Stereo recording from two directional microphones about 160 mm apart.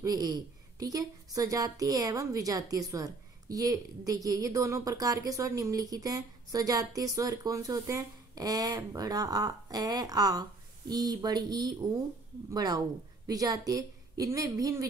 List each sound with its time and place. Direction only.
0.0 s a woman's voice: 25° right (ahead or behind)